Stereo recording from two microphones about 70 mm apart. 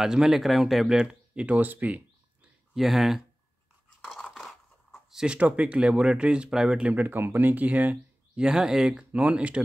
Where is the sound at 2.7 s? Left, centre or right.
Centre.